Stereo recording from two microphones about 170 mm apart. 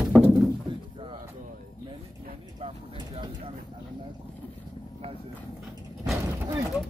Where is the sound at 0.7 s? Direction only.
30° right (ahead or behind).